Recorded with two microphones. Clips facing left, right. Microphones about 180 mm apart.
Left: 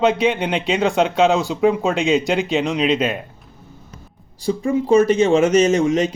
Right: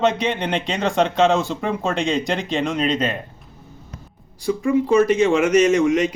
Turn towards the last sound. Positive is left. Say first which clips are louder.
# even
turn(degrees=25)  # may be behind; listen again after turning